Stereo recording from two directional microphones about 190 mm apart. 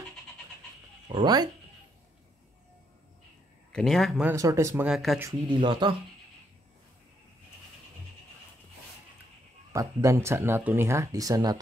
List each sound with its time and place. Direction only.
1.0 s speech: 25° right (ahead or behind)
3.7 s speech: centre (ahead or behind)
4.3 s speech: 15° right (ahead or behind)
4.8 s speech: centre (ahead or behind)
5.5 s speech: 25° right (ahead or behind)
9.7 s speech: 15° right (ahead or behind)